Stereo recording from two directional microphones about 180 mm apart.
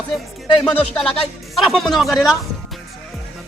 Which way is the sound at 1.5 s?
Centre (ahead or behind).